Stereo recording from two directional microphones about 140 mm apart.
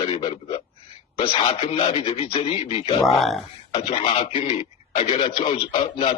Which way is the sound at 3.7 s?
40° left (ahead or behind).